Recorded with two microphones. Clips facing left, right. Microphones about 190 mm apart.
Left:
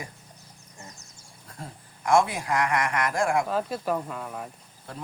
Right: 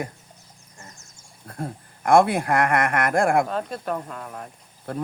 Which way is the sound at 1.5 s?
55° right (ahead or behind).